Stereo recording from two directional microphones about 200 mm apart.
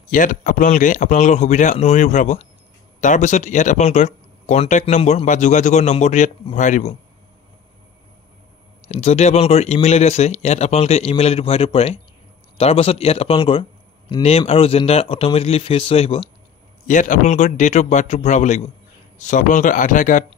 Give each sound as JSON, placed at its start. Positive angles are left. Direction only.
{"t": 0.1, "sound": "speech", "side_deg": 40}
{"t": 8.8, "sound": "a man's voice", "side_deg": 35}
{"t": 16.8, "sound": "speech", "side_deg": 40}